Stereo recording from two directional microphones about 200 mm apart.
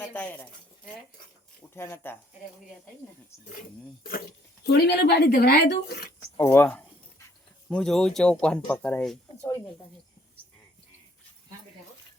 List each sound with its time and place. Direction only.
0.0 s speech: 10° left (ahead or behind)
1.7 s speech: 10° left (ahead or behind)
4.6 s a woman's voice: 55° left (ahead or behind)
6.3 s speech: 10° left (ahead or behind)